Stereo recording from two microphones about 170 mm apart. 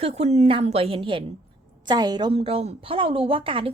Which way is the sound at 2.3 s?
35° right (ahead or behind).